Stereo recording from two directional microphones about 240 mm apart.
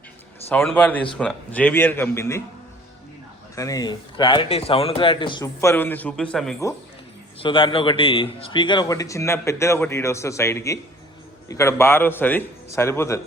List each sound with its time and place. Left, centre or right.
0.4 s a man's voice: centre
3.5 s a man's voice: centre
7.3 s a man's voice: left